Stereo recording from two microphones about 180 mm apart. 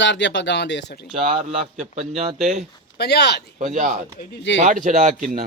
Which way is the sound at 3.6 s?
45° right (ahead or behind).